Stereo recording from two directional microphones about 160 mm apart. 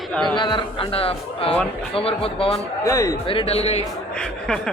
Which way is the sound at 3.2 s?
35° left (ahead or behind).